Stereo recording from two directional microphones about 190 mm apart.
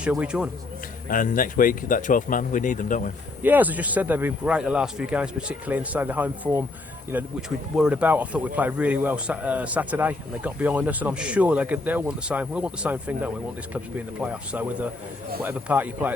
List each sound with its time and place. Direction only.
0.0 s speech: 5° right (ahead or behind)
1.1 s speech: 45° left (ahead or behind)
3.4 s a man's voice: 10° right (ahead or behind)